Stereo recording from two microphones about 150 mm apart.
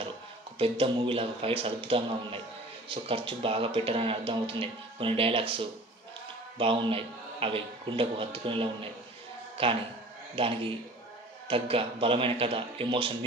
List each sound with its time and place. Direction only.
0.6 s speech: 40° right (ahead or behind)